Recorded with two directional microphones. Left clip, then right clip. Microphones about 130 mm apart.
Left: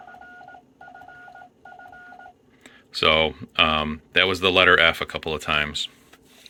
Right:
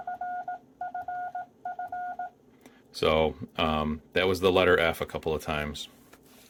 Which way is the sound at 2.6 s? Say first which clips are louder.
Left 6 dB; 15° right (ahead or behind).